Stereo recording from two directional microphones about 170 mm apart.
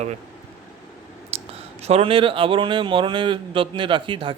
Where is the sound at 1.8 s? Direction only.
35° right (ahead or behind).